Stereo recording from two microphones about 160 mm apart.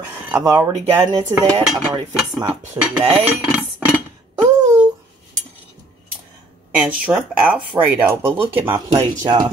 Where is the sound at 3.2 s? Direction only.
5° right (ahead or behind).